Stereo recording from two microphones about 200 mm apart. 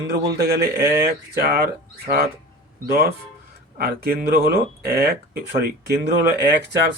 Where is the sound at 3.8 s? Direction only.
50° right (ahead or behind).